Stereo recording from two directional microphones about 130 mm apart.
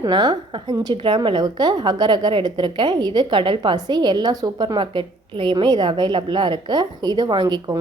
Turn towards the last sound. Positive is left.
turn(degrees=-30)  # may be behind; listen again after turning